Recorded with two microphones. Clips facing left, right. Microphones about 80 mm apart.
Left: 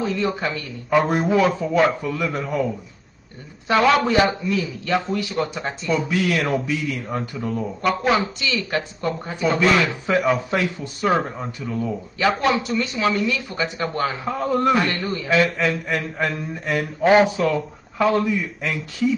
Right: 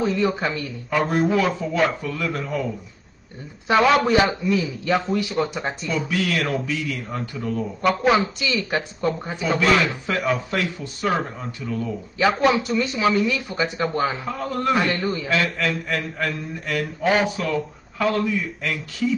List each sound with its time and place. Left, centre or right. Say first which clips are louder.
0.0 s a man's voice: right 1 dB; centre
0.8 s a man's voice: left 2 dB; centre
3.6 s a man's voice: even; centre
5.0 s a man's voice: right 1 dB; centre
5.9 s a man's voice: left 4 dB; centre
7.3 s speech: right 3 dB; centre
7.8 s speech: right 1 dB; centre
8.2 s a man's voice: right 1 dB; centre
9.8 s speech: left 3 dB; centre
12.3 s a man's voice: right 1 dB; centre
13.8 s a man's voice: right 1 dB; centre
14.2 s a man's voice: left 4 dB; centre
14.8 s a man's voice: even; centre
15.2 s a man's voice: left 6 dB; left